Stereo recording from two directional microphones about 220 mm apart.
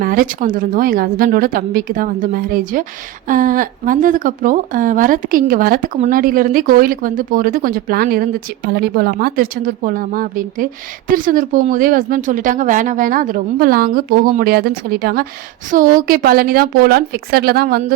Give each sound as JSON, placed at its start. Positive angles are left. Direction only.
{"t": 0.0, "sound": "a woman's voice", "side_deg": -40}